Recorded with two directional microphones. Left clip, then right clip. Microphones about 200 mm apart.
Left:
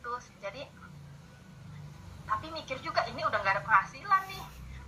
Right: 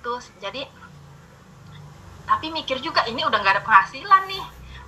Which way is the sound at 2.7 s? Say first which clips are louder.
Right 9 dB; 30° right (ahead or behind).